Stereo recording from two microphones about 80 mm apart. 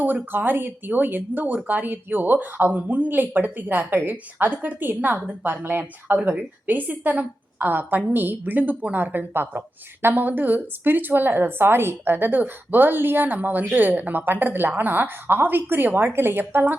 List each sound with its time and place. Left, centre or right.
0.0 s a woman's voice: right